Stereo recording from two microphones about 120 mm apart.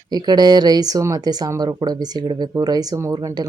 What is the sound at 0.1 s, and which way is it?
Speech, 35° right (ahead or behind).